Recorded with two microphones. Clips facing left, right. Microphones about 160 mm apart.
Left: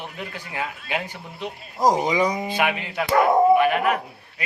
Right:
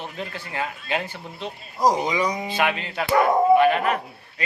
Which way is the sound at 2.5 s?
15° left (ahead or behind).